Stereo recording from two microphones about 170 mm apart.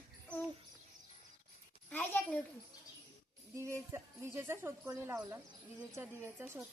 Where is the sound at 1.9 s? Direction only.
10° left (ahead or behind).